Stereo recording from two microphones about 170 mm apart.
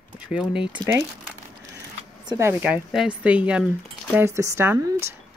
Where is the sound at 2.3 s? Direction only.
15° right (ahead or behind).